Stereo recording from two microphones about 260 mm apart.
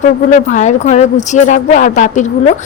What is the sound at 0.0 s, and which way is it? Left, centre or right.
A woman's voice, left.